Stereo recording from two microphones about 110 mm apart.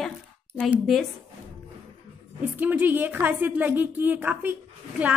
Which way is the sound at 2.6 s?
15° right (ahead or behind).